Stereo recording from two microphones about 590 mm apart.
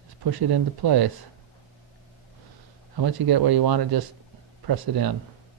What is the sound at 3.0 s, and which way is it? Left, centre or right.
Speech, right.